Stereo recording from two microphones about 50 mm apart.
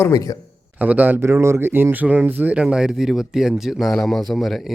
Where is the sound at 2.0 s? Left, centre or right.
Right.